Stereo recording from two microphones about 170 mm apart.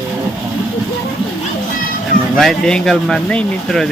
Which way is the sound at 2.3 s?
5° left (ahead or behind).